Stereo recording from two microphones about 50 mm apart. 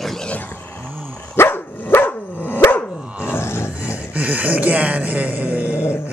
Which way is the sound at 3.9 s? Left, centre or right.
Right.